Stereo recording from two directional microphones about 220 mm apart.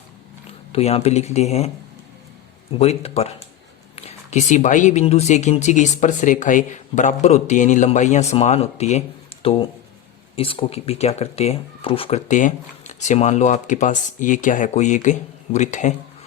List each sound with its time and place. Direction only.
0.7 s speech: 30° left (ahead or behind)
2.7 s speech: 30° left (ahead or behind)